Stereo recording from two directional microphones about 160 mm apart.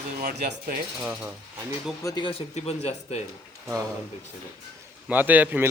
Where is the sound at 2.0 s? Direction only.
30° left (ahead or behind).